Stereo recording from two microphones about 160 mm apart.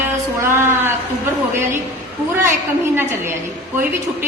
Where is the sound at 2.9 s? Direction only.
15° right (ahead or behind).